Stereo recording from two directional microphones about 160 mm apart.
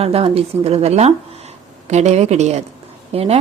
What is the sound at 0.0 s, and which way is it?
Speech, 40° right (ahead or behind).